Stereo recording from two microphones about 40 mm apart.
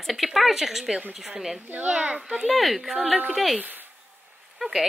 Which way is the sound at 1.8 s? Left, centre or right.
Right.